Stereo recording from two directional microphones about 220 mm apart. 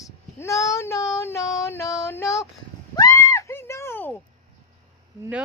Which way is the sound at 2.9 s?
15° left (ahead or behind).